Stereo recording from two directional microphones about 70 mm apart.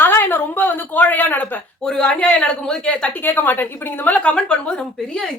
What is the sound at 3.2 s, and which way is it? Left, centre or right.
A woman's voice, left.